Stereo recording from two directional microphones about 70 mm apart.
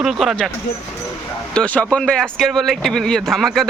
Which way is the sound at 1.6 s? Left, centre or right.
Centre.